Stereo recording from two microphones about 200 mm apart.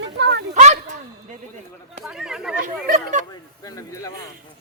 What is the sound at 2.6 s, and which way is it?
Speech, 40° right (ahead or behind).